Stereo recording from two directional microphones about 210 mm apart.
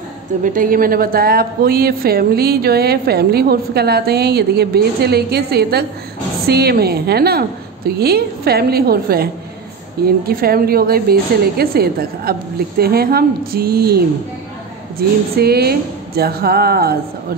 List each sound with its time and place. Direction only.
0.4 s speech: 40° right (ahead or behind)